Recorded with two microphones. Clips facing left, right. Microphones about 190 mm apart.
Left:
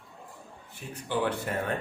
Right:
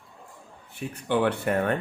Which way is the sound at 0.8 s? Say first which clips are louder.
Right 5 dB; 60° right (ahead or behind).